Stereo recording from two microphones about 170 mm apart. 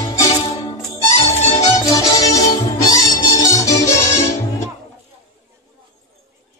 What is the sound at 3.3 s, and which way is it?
Music, 20° left (ahead or behind).